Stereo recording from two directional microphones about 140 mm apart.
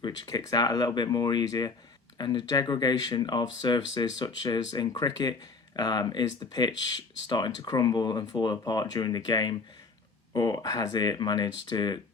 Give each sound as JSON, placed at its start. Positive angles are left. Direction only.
{"t": 0.0, "sound": "speech", "side_deg": 25}